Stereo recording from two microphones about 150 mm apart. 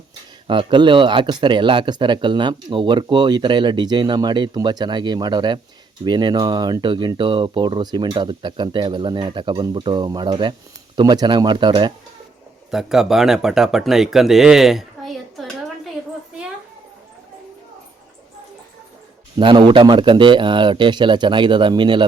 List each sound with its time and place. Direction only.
0.4 s speech: 35° right (ahead or behind)
12.7 s speech: 5° right (ahead or behind)
19.4 s speech: 35° right (ahead or behind)